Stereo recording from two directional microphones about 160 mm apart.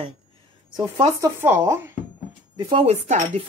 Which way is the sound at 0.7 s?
25° right (ahead or behind).